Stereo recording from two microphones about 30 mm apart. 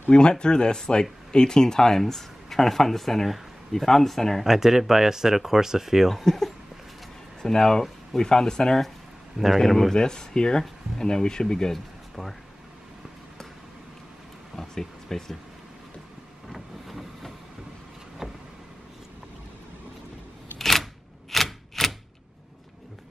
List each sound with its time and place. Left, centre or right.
0.1 s speech: left; by 4.4 s centre
4.5 s speech: centre
7.4 s speech: centre
9.5 s speech: centre
9.9 s speech: left
12.2 s speech: centre
14.5 s a sound: centre
16.4 s vehicle: centre
18.2 s vehicle: centre
20.5 s typewriter: centre